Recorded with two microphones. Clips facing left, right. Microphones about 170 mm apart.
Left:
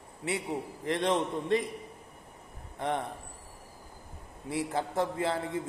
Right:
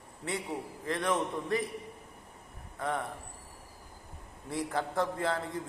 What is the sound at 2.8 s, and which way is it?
Speech, 20° left (ahead or behind).